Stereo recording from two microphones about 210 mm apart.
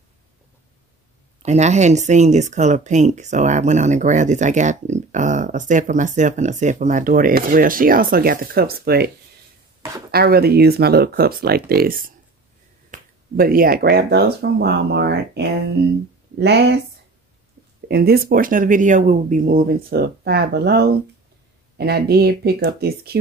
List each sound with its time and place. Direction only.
1.4 s speech: 30° right (ahead or behind); by 9.1 s 50° right (ahead or behind)
10.1 s speech: 45° right (ahead or behind)
17.8 s speech: 50° right (ahead or behind)